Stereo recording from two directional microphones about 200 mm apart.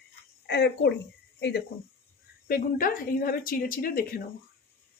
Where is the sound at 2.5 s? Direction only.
45° left (ahead or behind).